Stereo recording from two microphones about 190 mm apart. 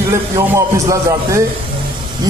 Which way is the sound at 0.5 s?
15° right (ahead or behind).